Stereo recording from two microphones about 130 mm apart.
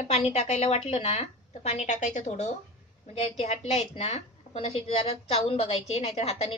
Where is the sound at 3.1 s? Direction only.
55° left (ahead or behind).